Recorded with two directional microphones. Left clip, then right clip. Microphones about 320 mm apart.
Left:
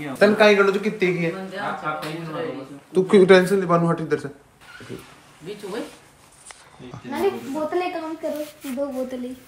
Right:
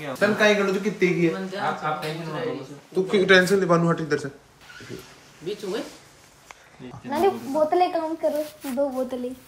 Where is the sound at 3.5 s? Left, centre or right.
Centre.